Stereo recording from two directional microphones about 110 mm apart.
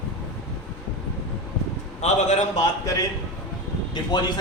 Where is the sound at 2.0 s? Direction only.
90° left.